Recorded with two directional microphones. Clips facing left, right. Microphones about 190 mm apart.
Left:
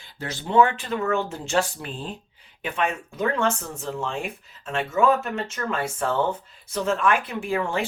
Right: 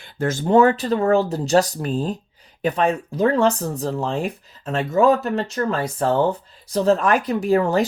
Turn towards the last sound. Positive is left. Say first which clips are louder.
# right 8 dB
turn(degrees=-40)  # may be behind; listen again after turning